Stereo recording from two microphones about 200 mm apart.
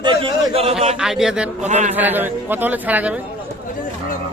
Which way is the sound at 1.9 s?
10° right (ahead or behind).